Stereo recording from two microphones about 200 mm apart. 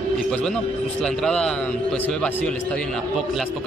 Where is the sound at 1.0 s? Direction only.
5° left (ahead or behind).